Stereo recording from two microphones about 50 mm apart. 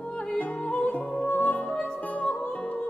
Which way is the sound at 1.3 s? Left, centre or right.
Left.